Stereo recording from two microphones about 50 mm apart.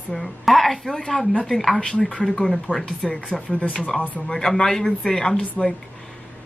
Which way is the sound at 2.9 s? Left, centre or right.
Centre.